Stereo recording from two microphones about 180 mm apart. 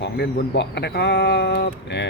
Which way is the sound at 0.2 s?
65° left (ahead or behind).